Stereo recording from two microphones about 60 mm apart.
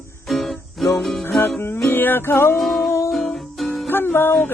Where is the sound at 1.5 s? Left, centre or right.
Left.